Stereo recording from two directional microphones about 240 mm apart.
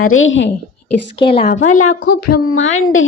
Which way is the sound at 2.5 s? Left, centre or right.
Left.